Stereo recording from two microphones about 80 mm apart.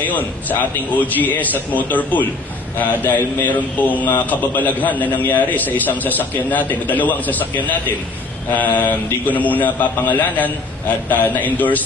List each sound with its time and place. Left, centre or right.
0.0 s a man's voice: centre